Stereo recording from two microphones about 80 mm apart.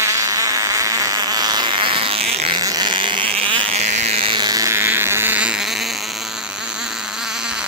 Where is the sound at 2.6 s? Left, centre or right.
Right.